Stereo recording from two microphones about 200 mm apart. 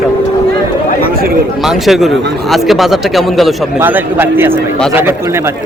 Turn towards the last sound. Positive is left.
turn(degrees=-10)  # may be behind; listen again after turning